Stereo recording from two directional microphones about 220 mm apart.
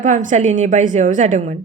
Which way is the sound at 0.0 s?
35° right (ahead or behind).